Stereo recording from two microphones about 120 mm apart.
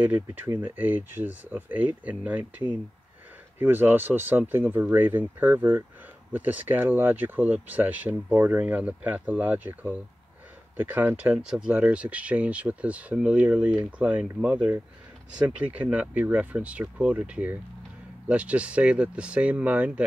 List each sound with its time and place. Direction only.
0.0 s speech: 15° right (ahead or behind)
3.5 s speech: 15° right (ahead or behind)